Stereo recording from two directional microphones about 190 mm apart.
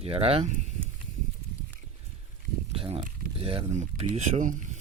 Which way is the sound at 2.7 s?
30° right (ahead or behind).